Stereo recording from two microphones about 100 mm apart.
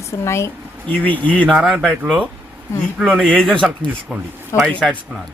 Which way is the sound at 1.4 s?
Centre (ahead or behind).